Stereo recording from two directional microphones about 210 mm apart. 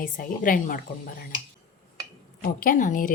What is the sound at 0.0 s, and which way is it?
A woman's voice, 40° left (ahead or behind).